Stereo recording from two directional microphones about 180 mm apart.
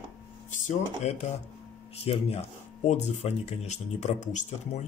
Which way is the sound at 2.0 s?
35° left (ahead or behind).